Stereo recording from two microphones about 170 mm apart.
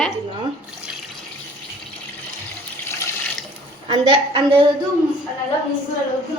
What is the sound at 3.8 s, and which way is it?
Speech, 30° right (ahead or behind).